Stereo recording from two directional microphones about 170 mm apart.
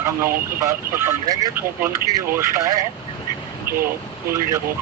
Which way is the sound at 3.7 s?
15° right (ahead or behind).